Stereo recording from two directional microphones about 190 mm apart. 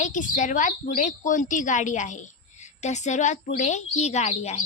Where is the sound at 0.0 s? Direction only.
40° left (ahead or behind).